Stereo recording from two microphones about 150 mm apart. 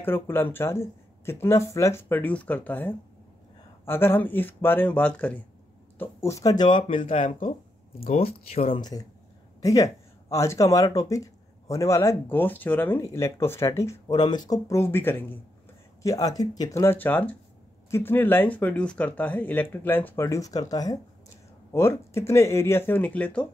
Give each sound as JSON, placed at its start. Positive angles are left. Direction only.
{"t": 0.0, "sound": "speech", "side_deg": 15}
{"t": 9.6, "sound": "a man's voice", "side_deg": 20}